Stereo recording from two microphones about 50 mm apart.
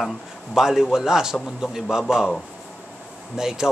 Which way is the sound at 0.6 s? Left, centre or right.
Centre.